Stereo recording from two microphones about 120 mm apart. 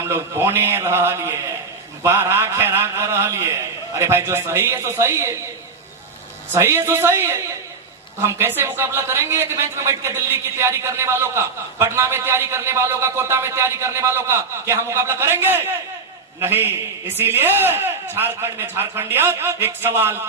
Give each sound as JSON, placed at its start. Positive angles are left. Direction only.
{"t": 0.0, "sound": "a woman's voice", "side_deg": -20}
{"t": 6.5, "sound": "a woman's voice", "side_deg": -20}